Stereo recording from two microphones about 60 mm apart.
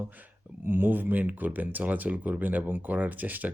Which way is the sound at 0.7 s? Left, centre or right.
Right.